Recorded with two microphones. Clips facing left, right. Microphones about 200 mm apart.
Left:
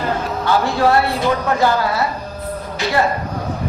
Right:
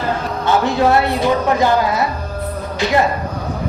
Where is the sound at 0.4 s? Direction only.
20° right (ahead or behind).